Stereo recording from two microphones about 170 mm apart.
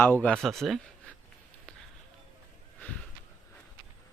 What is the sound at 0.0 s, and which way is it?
Speech, 10° left (ahead or behind).